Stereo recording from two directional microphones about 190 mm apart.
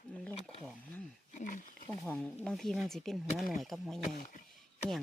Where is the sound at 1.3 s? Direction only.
45° left (ahead or behind).